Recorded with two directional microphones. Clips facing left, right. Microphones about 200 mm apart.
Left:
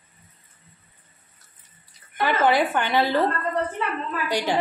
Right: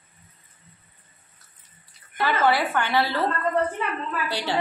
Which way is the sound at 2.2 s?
15° left (ahead or behind).